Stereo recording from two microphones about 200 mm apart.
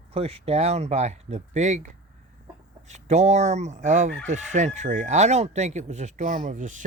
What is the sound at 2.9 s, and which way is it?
Chicken, 35° right (ahead or behind).